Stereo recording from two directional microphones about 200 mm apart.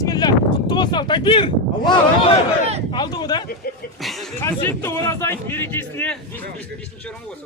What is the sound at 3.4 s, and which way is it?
Speech, 50° left (ahead or behind).